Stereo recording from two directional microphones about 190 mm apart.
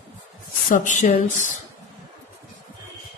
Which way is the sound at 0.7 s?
40° left (ahead or behind).